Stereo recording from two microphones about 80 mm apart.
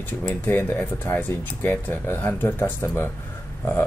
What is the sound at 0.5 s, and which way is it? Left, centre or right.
Speech, left.